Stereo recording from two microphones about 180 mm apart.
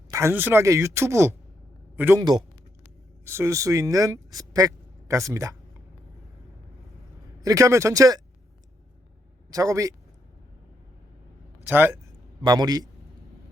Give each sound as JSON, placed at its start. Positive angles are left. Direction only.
{"t": 0.1, "sound": "speech", "side_deg": -15}
{"t": 3.2, "sound": "speech", "side_deg": -15}
{"t": 7.4, "sound": "speech", "side_deg": -15}
{"t": 9.5, "sound": "speech", "side_deg": -20}
{"t": 11.7, "sound": "speech", "side_deg": -10}
{"t": 12.5, "sound": "speech", "side_deg": -20}